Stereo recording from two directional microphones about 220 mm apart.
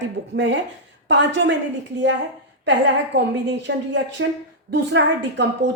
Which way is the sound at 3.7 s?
55° right (ahead or behind).